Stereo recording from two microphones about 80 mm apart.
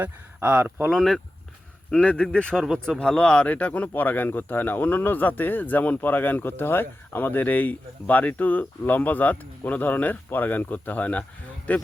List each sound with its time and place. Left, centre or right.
0.0 s speech: right
0.9 s speech: centre